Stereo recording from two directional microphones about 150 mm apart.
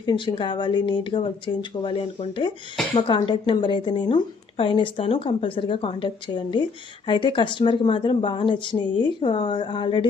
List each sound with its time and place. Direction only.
0.0 s speech: 30° left (ahead or behind)